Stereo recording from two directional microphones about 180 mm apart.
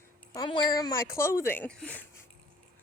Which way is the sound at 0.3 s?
25° left (ahead or behind).